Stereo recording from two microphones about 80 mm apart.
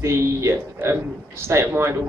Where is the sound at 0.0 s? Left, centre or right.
Right.